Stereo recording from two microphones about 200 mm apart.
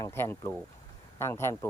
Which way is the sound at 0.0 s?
10° left (ahead or behind).